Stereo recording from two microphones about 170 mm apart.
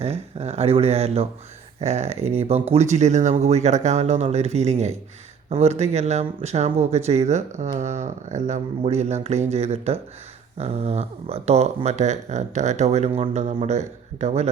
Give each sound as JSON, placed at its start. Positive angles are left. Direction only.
{"t": 0.0, "sound": "speech", "side_deg": -40}